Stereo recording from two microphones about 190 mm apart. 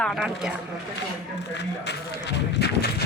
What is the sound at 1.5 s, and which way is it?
Speech, 65° left (ahead or behind).